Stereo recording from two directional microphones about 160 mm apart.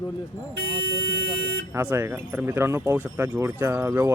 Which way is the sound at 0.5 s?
85° right.